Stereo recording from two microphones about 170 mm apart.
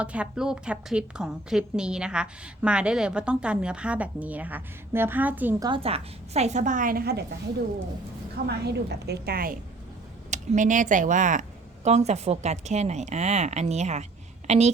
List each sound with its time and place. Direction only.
0.0 s a woman's voice: 5° right (ahead or behind)
5.6 s a woman's voice: 35° right (ahead or behind); by 7.3 s 65° right (ahead or behind)
8.4 s a woman's voice: 75° right (ahead or behind)
10.3 s a woman's voice: 45° right (ahead or behind)